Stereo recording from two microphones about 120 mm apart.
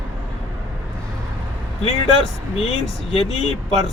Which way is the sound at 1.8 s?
55° left (ahead or behind).